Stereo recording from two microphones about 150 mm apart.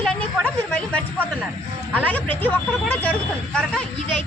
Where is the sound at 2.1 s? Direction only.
10° left (ahead or behind).